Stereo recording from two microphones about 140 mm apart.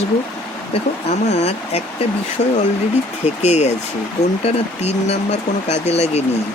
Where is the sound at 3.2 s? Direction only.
50° left (ahead or behind).